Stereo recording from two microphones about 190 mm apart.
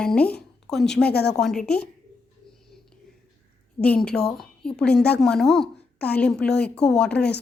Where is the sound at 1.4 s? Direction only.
5° left (ahead or behind).